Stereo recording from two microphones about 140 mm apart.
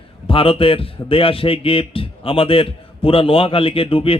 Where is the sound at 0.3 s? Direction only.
40° left (ahead or behind).